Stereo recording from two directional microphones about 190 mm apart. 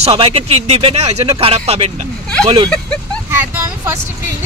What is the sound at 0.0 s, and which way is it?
Speech, 30° right (ahead or behind).